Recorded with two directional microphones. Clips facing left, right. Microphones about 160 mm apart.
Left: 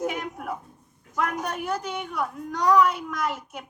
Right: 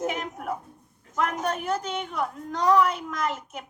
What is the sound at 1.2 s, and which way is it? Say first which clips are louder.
A woman's voice: right 1 dB; 20° right (ahead or behind).